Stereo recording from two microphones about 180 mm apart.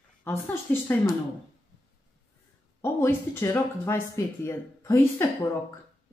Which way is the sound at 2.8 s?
15° left (ahead or behind).